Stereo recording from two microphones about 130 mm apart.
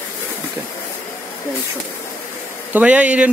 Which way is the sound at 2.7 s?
10° right (ahead or behind).